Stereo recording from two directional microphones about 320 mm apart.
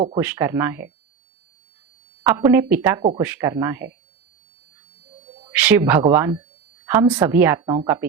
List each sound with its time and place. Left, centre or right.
0.2 s a woman's voice: centre
2.2 s a woman's voice: centre
5.5 s a woman's voice: centre